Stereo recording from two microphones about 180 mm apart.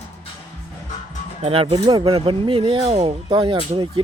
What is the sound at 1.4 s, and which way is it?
Speech, 30° right (ahead or behind).